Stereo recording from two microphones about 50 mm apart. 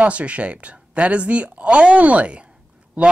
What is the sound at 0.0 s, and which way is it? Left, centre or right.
Speech, right.